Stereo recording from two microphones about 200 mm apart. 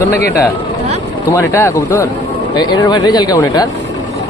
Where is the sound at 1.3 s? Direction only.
15° left (ahead or behind).